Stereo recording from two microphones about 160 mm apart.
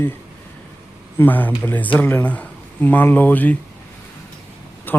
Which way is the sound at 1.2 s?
10° left (ahead or behind).